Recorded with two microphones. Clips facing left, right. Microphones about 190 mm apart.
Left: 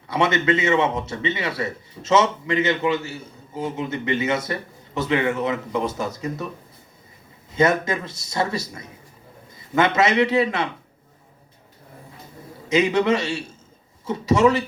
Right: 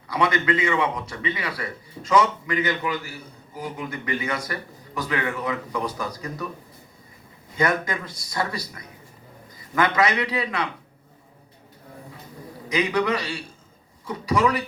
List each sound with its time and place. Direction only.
0.1 s a man's voice: 25° left (ahead or behind)
7.5 s a man's voice: 25° left (ahead or behind)
12.6 s a man's voice: 25° left (ahead or behind)